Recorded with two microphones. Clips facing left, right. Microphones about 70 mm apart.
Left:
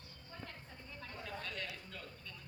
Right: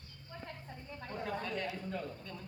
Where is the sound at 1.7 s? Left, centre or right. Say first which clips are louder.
Right 10 dB; right.